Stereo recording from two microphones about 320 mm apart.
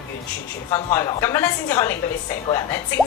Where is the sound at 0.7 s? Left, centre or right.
Centre.